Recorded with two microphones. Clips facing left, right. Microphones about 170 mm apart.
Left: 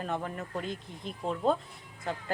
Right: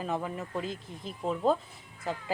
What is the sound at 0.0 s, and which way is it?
Speech, 5° right (ahead or behind).